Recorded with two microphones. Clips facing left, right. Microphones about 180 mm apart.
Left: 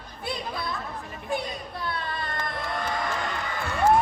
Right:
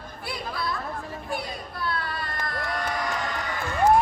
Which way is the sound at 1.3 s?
20° left (ahead or behind).